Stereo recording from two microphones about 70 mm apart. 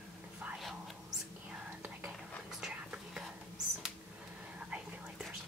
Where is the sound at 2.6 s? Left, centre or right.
Centre.